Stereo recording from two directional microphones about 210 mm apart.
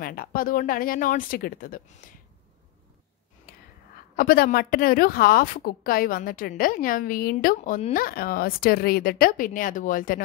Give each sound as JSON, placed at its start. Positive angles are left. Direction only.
{"t": 0.0, "sound": "a woman's voice", "side_deg": 45}
{"t": 3.5, "sound": "whispering", "side_deg": 45}
{"t": 4.2, "sound": "a woman's voice", "side_deg": 40}